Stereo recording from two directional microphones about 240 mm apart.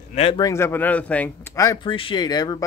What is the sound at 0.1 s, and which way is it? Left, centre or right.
Speech, left.